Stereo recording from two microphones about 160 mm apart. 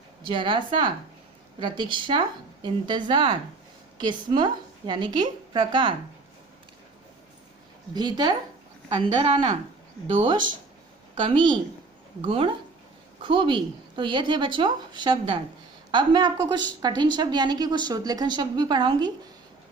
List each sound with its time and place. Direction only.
0.3 s a woman's voice: 30° right (ahead or behind)
7.9 s a woman's voice: 25° right (ahead or behind)
11.1 s a woman's voice: 30° right (ahead or behind)